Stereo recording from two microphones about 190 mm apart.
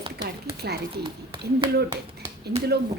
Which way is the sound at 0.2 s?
55° right (ahead or behind).